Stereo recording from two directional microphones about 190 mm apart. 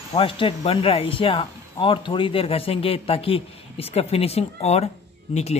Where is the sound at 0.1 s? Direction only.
30° left (ahead or behind).